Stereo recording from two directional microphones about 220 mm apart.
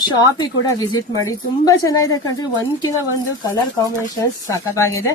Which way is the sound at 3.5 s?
15° left (ahead or behind).